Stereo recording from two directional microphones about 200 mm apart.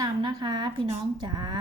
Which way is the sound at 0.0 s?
20° right (ahead or behind).